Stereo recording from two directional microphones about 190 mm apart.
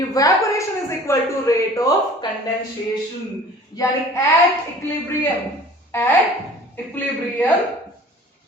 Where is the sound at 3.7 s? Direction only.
15° left (ahead or behind).